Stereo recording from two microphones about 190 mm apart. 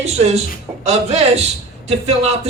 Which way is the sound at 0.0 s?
35° right (ahead or behind).